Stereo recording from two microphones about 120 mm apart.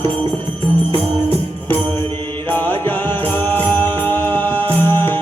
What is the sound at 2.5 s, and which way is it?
Music, 15° left (ahead or behind).